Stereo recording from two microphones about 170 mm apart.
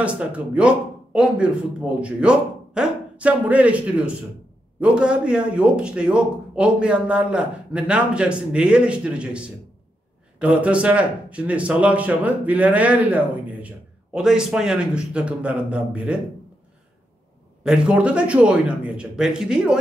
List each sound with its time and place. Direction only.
0.0 s speech: 5° right (ahead or behind)
10.4 s speech: 5° right (ahead or behind)
17.6 s speech: 5° right (ahead or behind)